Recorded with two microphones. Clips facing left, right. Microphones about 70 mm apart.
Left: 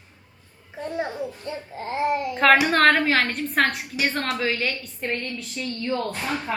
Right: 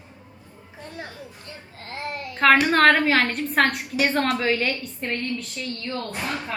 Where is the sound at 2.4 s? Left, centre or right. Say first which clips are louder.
Right 1 dB; centre.